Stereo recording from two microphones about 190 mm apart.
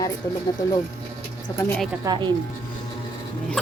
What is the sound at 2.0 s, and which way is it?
Speech, 25° right (ahead or behind).